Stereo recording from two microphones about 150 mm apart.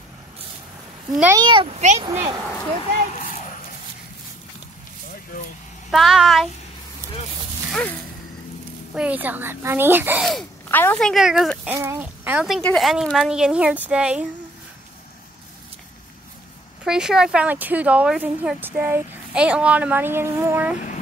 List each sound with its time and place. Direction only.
1.3 s a child's voice: 30° right (ahead or behind); by 2.0 s 45° right (ahead or behind)
2.0 s speech: 25° right (ahead or behind)
5.9 s speech: centre (ahead or behind)
8.9 s speech: 10° right (ahead or behind)
10.7 s speech: 15° left (ahead or behind)
11.0 s speech: centre (ahead or behind)
11.7 s speech: 20° right (ahead or behind)
16.8 s speech: 5° right (ahead or behind)